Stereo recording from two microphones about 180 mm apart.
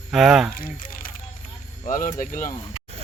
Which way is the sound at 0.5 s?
50° left (ahead or behind).